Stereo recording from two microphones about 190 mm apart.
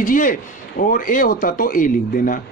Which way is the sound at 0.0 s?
45° left (ahead or behind).